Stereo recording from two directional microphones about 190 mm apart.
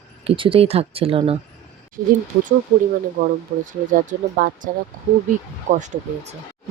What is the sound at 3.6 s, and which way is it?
Speech, 45° right (ahead or behind).